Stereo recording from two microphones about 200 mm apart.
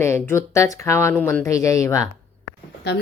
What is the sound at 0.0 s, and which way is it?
Speech, 15° left (ahead or behind).